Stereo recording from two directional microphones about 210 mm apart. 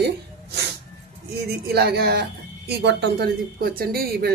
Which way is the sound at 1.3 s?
50° right (ahead or behind).